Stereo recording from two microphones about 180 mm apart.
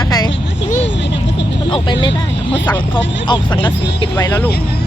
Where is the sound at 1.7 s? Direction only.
25° left (ahead or behind).